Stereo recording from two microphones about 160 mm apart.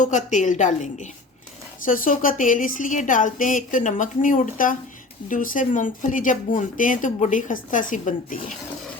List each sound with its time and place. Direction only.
0.0 s speech: 50° left (ahead or behind)